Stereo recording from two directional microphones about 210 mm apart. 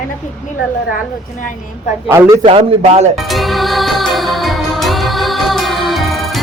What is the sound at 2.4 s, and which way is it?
Speech, 30° right (ahead or behind).